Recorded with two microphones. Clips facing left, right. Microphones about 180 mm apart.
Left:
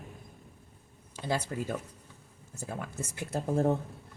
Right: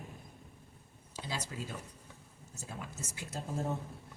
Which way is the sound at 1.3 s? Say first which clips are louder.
Left 9 dB; 55° left (ahead or behind).